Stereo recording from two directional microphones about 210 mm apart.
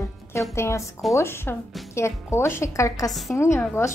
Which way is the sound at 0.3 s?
10° left (ahead or behind).